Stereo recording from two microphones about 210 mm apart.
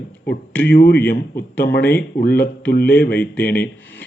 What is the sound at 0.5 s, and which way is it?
Speech, 10° left (ahead or behind).